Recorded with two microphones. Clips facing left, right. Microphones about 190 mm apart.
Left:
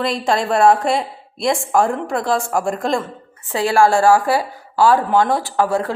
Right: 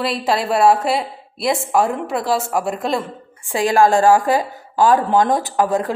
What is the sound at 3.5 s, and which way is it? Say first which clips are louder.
A woman's voice: even; 15° right (ahead or behind).